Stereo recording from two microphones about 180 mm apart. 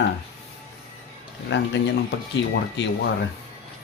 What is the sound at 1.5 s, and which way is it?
Speech, 70° left (ahead or behind).